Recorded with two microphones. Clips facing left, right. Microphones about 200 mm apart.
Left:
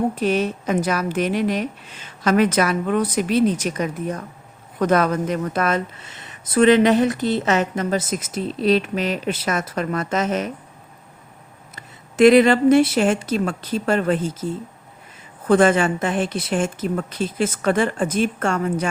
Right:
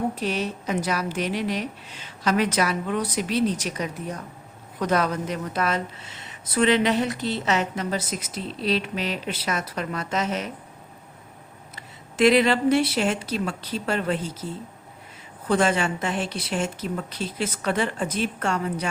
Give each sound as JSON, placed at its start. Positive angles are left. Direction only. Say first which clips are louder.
{"t": 0.2, "sound": "speech", "louder": "left 7 dB", "side_deg": 50}
{"t": 11.7, "sound": "speech", "louder": "left 1 dB", "side_deg": 50}
{"t": 15.4, "sound": "speech", "louder": "left 6 dB", "side_deg": 50}